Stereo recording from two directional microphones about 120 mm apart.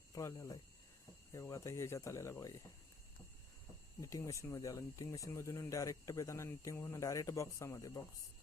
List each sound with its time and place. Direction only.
0.1 s a sound: 25° left (ahead or behind)
1.3 s speech: 25° left (ahead or behind)
4.0 s speech: 25° left (ahead or behind)